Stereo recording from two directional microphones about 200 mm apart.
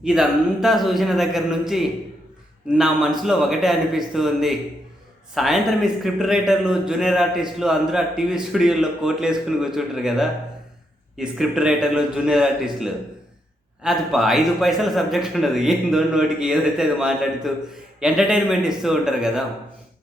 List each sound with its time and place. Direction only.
0.0 s speech: 5° right (ahead or behind)